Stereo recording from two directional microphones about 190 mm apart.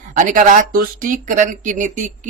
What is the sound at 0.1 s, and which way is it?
Speech, 45° right (ahead or behind).